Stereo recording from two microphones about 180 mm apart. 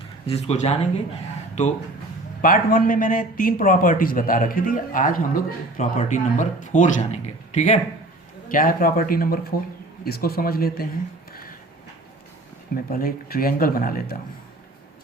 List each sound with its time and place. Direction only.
0.3 s speech: 35° left (ahead or behind)
2.4 s a man's voice: 50° left (ahead or behind)
11.3 s a sound: 55° left (ahead or behind)
12.7 s speech: 55° left (ahead or behind)